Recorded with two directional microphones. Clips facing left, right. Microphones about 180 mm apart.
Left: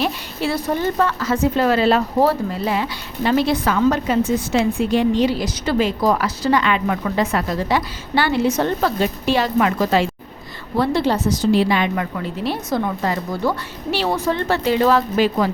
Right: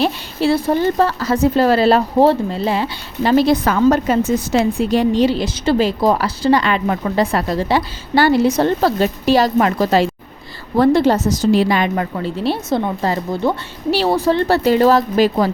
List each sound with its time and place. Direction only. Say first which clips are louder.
0.0 s a woman's voice: right 5 dB; 30° right (ahead or behind)
10.8 s a woman's voice: right 6 dB; 45° right (ahead or behind); by 13.6 s 25° right (ahead or behind)
13.9 s a woman's voice: right 5 dB; 35° right (ahead or behind)